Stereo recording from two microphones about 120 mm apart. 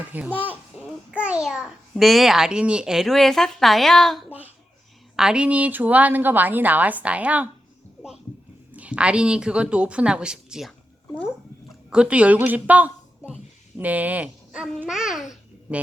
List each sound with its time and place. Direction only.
0.1 s a child's voice: 15° right (ahead or behind); by 4.3 s 5° left (ahead or behind)
4.3 s a sound: 15° right (ahead or behind)
5.1 s a woman's voice: 5° right (ahead or behind)
8.7 s a woman's voice: 10° right (ahead or behind)